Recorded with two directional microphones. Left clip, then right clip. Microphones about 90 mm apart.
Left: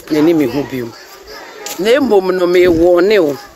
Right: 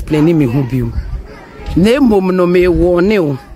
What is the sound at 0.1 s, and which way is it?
Speech, 5° right (ahead or behind).